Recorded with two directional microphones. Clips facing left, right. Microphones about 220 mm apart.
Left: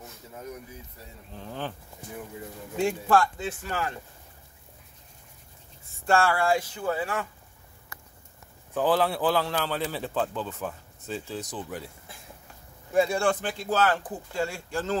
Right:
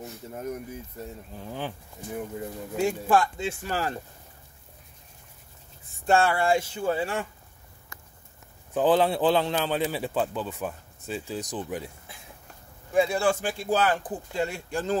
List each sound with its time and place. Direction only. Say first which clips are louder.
1.3 s a man's voice: left 1 dB; 10° right (ahead or behind)
2.8 s speech: even; 10° right (ahead or behind); by 4.0 s 35° right (ahead or behind)
6.0 s speech: right 1 dB; 20° right (ahead or behind)
8.7 s a man's voice: right 3 dB; 20° right (ahead or behind)
12.9 s a man's voice: even; centre (ahead or behind); by 15.0 s 15° right (ahead or behind)